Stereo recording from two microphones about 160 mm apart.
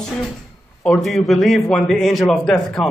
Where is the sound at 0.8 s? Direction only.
5° left (ahead or behind).